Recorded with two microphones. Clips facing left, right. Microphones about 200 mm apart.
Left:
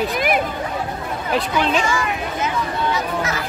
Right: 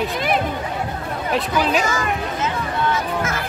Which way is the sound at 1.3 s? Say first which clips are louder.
Even; 5° right (ahead or behind).